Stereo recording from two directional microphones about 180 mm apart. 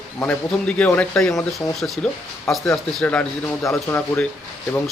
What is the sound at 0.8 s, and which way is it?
Speech, 5° left (ahead or behind).